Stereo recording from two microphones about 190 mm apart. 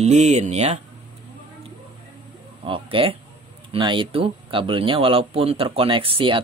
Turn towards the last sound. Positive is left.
turn(degrees=-30)  # may be behind; listen again after turning